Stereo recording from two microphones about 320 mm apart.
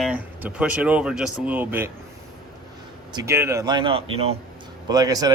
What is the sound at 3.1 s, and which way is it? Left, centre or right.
Speech, centre.